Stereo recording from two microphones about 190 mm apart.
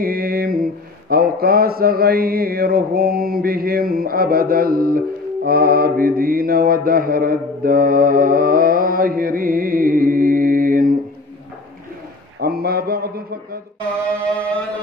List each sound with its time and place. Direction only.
0.0 s mantra: 50° right (ahead or behind)
12.4 s speech: 55° right (ahead or behind)